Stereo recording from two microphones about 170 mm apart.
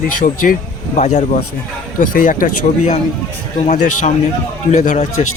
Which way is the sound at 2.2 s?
55° left (ahead or behind).